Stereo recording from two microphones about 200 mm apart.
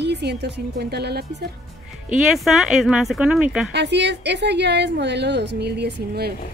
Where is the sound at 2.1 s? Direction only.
Centre (ahead or behind).